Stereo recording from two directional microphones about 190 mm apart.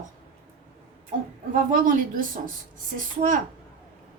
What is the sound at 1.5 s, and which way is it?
Speech, 45° right (ahead or behind).